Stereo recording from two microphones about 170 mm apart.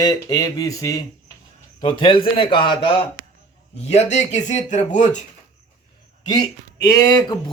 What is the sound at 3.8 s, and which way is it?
Speech, 40° left (ahead or behind).